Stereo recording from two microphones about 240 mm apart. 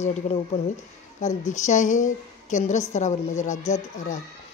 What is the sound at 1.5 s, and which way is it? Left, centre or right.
A woman's voice, left.